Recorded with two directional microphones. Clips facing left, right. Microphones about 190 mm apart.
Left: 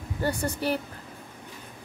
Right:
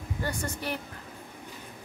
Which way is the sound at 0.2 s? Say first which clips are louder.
Left 6 dB; 35° left (ahead or behind).